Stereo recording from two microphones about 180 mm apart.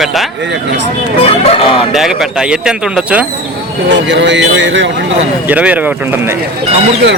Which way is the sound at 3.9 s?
80° right.